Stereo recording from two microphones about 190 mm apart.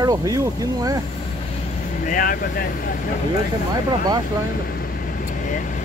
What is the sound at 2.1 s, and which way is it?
Speech, 45° left (ahead or behind).